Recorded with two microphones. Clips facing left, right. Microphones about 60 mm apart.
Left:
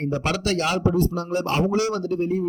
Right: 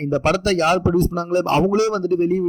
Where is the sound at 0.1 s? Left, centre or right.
Right.